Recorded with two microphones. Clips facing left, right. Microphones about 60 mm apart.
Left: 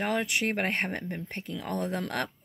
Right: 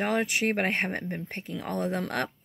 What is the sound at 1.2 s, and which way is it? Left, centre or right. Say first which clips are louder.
A woman's voice: right 1 dB; centre.